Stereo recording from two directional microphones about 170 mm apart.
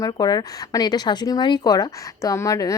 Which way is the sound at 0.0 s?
25° left (ahead or behind).